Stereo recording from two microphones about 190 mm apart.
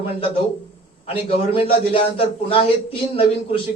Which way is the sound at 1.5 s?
30° left (ahead or behind).